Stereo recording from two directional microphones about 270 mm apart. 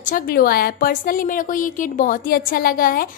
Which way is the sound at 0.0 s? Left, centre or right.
Left.